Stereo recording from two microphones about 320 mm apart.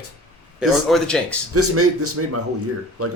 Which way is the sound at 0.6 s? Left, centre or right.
Centre.